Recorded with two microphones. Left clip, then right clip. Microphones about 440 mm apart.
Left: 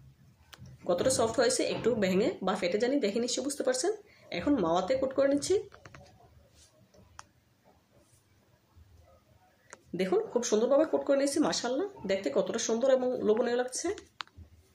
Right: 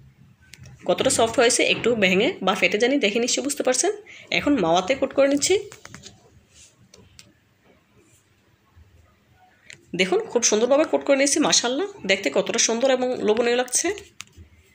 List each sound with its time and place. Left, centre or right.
0.8 s a woman's voice: right
9.9 s a woman's voice: right
14.2 s a sound: right